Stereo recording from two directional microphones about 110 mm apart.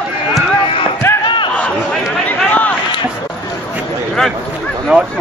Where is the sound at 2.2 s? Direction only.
15° left (ahead or behind).